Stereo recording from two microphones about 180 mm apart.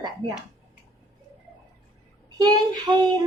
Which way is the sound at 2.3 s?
20° right (ahead or behind).